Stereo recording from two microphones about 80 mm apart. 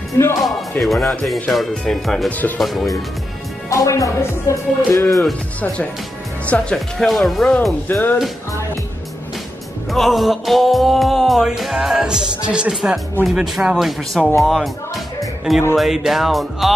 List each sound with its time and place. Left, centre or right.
0.4 s speech: centre
1.5 s music: centre
2.2 s speech: left
2.6 s music: centre
3.7 s speech: left
5.2 s speech: centre
7.1 s music: centre
7.9 s speech: left
9.8 s music: centre
15.7 s music: centre